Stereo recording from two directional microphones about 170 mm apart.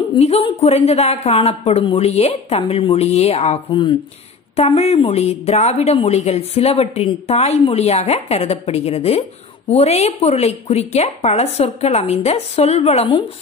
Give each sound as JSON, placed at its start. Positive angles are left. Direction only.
{"t": 0.1, "sound": "a woman's voice", "side_deg": 35}